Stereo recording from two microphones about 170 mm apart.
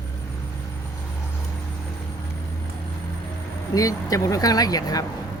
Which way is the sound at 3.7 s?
20° left (ahead or behind).